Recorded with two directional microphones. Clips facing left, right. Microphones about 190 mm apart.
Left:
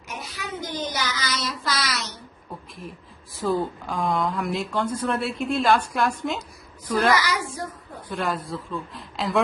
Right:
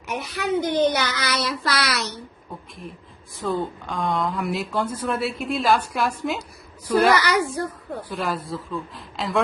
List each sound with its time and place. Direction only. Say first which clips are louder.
0.1 s child singing: right 10 dB; 65° right (ahead or behind)
2.5 s a sound: left 1 dB; centre (ahead or behind)
3.4 s speech: left 1 dB; centre (ahead or behind)
7.2 s child singing: right 5 dB; 65° right (ahead or behind)
8.1 s speech: left 1 dB; centre (ahead or behind)